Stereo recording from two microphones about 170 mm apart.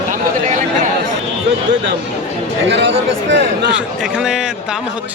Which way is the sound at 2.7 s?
90° right.